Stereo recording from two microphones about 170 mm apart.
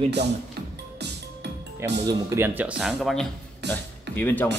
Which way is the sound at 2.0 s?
20° right (ahead or behind).